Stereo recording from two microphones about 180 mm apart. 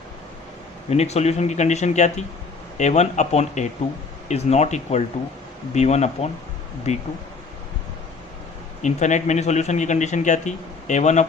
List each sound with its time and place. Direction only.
0.9 s a man's voice: 35° left (ahead or behind)
8.8 s a man's voice: 40° left (ahead or behind)